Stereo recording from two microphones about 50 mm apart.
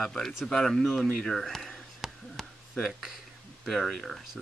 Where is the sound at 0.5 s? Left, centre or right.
Centre.